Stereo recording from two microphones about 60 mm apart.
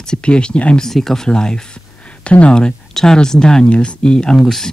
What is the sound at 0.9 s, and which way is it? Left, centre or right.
Speech, centre.